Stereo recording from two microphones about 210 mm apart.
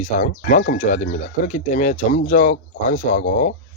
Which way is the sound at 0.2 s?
40° left (ahead or behind).